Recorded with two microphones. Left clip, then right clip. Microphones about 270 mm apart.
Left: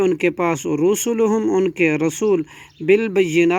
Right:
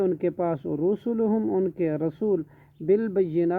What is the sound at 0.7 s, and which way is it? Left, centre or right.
Speech, left.